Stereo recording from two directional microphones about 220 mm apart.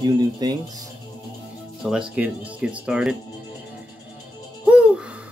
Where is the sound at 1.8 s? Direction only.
5° right (ahead or behind).